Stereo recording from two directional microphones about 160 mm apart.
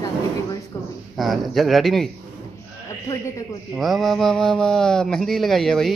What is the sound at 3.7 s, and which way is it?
Speech, centre (ahead or behind).